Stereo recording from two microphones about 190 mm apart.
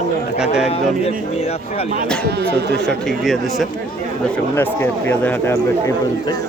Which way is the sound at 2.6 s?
60° right (ahead or behind).